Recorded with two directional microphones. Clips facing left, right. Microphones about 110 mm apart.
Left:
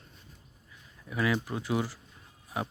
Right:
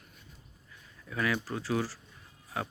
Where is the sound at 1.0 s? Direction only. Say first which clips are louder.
Left 2 dB; 15° left (ahead or behind).